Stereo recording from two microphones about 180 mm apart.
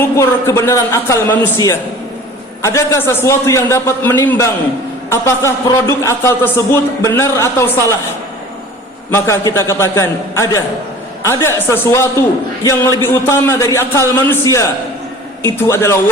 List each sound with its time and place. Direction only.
0.0 s a man's voice: 15° left (ahead or behind)
9.0 s a man's voice: 15° left (ahead or behind)